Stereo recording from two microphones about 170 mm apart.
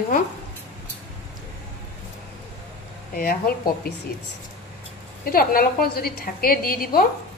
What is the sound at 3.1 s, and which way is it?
Speech, 60° left (ahead or behind).